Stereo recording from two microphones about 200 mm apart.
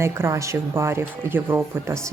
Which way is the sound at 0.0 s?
15° right (ahead or behind).